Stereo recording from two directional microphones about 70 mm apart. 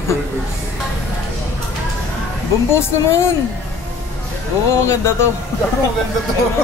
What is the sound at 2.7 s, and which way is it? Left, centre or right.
Speech, left.